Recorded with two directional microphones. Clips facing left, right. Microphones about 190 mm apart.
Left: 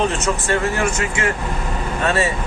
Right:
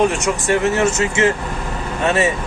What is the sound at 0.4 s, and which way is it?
Speech, 20° right (ahead or behind).